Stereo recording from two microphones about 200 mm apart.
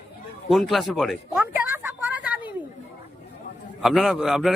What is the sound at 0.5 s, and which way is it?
Speech, centre (ahead or behind).